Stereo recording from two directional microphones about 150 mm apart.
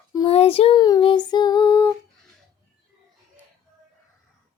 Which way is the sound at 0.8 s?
30° left (ahead or behind).